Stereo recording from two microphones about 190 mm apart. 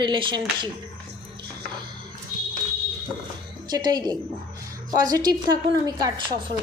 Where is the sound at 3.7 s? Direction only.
20° right (ahead or behind).